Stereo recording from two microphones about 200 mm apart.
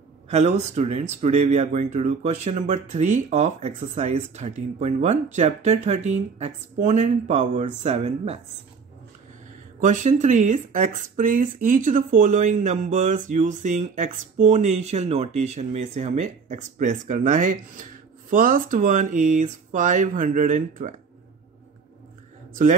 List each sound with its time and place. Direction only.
0.3 s speech: 35° right (ahead or behind)
9.8 s speech: 40° right (ahead or behind)
22.6 s speech: 40° right (ahead or behind)